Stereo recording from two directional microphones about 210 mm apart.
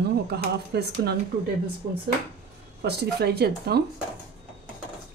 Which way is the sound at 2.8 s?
50° right (ahead or behind).